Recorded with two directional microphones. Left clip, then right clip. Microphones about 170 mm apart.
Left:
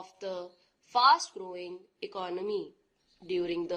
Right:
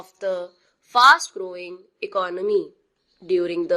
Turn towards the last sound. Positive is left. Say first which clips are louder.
# right 10 dB
turn(degrees=-20)  # may be behind; listen again after turning